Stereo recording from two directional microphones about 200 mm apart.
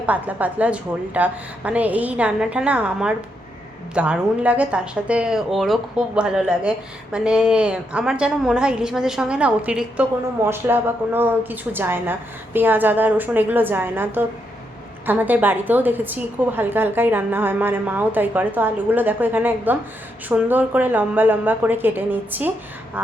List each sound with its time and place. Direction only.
0.0 s a woman's voice: 10° right (ahead or behind)